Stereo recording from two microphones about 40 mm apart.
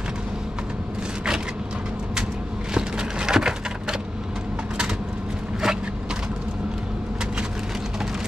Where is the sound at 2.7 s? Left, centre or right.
Centre.